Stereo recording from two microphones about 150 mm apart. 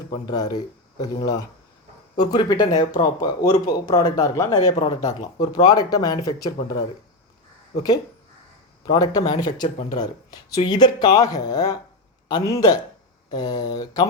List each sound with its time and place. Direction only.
0.1 s speech: 25° left (ahead or behind)
8.9 s speech: 25° left (ahead or behind)